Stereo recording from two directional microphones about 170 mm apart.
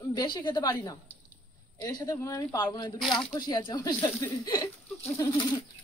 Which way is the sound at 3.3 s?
25° left (ahead or behind).